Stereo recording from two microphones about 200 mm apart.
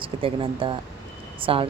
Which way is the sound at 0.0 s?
25° right (ahead or behind).